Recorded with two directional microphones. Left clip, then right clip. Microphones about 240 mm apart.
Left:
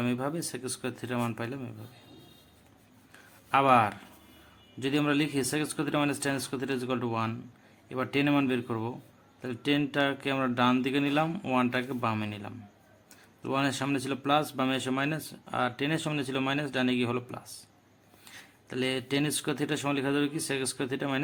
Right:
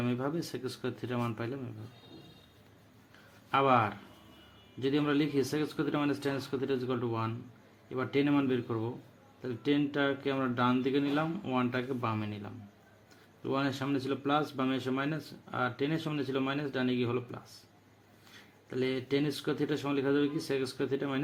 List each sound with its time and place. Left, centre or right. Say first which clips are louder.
0.0 s speech: left 2 dB; centre
3.5 s speech: left 4 dB; centre
18.7 s speech: left 2 dB; centre